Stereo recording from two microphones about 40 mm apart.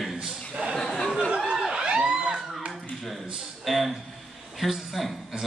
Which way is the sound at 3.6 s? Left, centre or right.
Centre.